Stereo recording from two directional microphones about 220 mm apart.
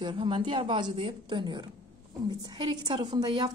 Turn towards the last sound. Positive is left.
turn(degrees=-20)  # may be behind; listen again after turning